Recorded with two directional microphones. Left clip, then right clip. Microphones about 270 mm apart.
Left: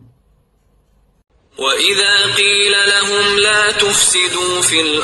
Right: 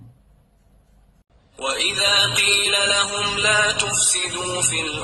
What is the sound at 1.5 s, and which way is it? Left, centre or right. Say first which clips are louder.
Mantra: left 8 dB; left.